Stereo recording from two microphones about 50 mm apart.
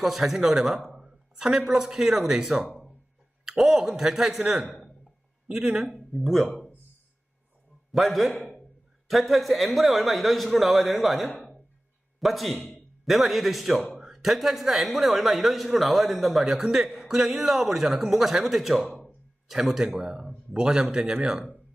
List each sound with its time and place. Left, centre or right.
0.0 s a man's voice: centre
5.9 s speech: centre
7.9 s a man's voice: centre